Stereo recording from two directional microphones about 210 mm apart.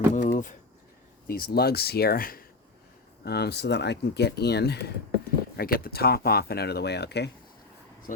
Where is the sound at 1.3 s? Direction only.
45° left (ahead or behind).